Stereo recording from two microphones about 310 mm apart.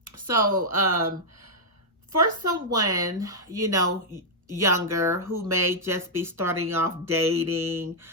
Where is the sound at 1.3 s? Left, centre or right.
Right.